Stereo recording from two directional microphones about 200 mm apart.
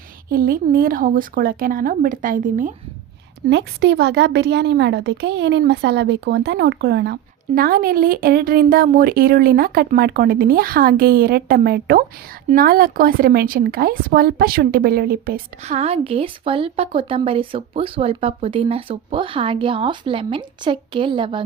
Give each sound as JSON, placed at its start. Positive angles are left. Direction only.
{"t": 0.3, "sound": "a woman's voice", "side_deg": -45}
{"t": 3.5, "sound": "a woman's voice", "side_deg": -60}
{"t": 15.6, "sound": "a woman's voice", "side_deg": -30}